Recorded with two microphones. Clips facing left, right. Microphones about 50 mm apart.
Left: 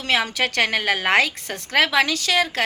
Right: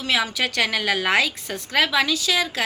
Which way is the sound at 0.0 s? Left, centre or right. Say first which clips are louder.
Left 1 dB; left.